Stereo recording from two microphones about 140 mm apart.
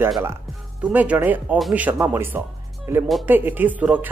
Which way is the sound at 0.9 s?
10° right (ahead or behind).